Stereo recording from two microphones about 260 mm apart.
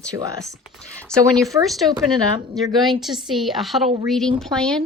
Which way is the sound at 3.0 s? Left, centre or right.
Centre.